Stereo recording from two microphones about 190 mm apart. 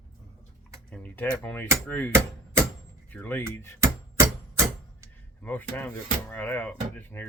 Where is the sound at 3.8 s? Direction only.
15° right (ahead or behind).